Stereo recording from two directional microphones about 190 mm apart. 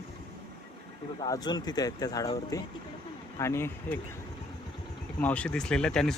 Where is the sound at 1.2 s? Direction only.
20° left (ahead or behind).